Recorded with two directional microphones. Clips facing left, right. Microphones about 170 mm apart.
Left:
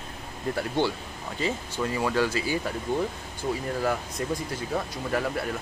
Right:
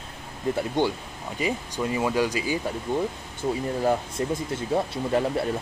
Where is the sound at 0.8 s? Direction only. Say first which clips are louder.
Right 2 dB; 20° right (ahead or behind).